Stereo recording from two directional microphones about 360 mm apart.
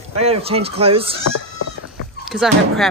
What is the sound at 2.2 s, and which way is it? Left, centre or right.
Speech, centre.